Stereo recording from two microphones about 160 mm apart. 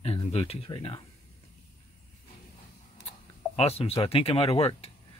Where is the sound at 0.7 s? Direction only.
30° left (ahead or behind).